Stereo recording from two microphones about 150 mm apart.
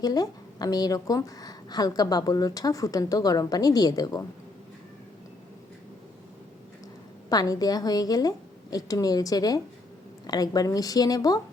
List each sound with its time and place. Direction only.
0.0 s a woman's voice: 25° left (ahead or behind)
7.3 s a woman's voice: 25° left (ahead or behind)